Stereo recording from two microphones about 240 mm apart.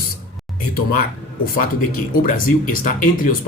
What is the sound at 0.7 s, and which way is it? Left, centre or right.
Speech, left.